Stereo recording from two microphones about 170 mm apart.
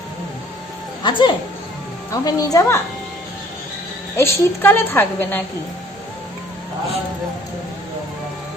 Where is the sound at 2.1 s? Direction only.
20° left (ahead or behind).